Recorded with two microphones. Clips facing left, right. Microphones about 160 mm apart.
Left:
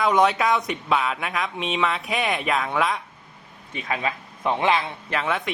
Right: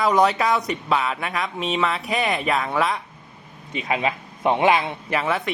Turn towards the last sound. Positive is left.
turn(degrees=-5)  # may be behind; listen again after turning